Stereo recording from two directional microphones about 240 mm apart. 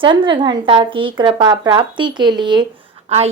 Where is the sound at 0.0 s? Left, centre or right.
Right.